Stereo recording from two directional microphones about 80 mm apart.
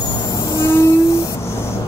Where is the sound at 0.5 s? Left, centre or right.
Left.